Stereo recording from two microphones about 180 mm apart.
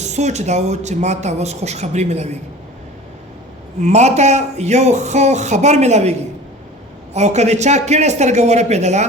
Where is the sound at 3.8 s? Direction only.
40° right (ahead or behind).